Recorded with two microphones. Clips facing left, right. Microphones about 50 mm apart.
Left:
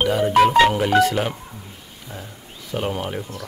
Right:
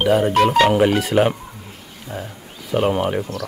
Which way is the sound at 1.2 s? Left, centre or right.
Right.